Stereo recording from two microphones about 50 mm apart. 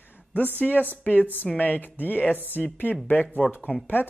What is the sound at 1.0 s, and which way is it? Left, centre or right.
A man's voice, left.